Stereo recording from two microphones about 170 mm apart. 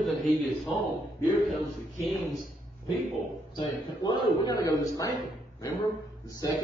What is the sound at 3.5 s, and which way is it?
A woman's voice, 25° left (ahead or behind).